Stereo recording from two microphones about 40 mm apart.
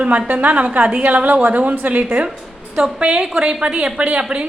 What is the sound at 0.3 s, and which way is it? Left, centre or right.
A woman's voice, right.